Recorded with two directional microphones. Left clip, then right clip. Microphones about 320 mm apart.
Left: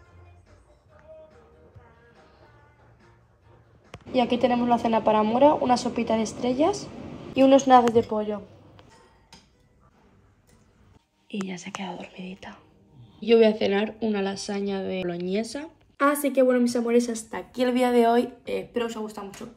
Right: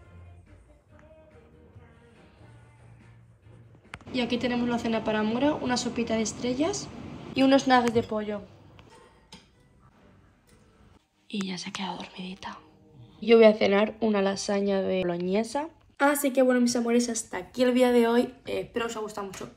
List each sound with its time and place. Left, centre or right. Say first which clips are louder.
3.9 s a sound: left 6 dB; right
4.7 s a woman's voice: left 7 dB; right
7.7 s a woman's voice: left 5 dB; centre
11.5 s a woman's voice: right 1 dB; centre
11.9 s speech: even; right
12.4 s a woman's voice: right 3 dB; centre